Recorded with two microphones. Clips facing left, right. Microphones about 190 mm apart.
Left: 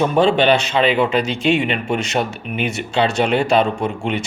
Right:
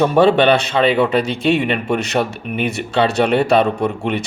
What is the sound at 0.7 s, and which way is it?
Speech, 55° right (ahead or behind).